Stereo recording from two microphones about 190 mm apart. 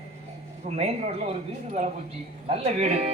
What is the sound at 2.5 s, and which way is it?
Speech, 35° right (ahead or behind).